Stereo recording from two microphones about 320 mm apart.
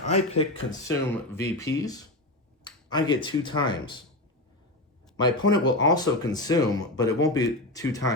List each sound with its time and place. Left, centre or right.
0.0 s speech: left
0.9 s speech: centre
5.1 s speech: centre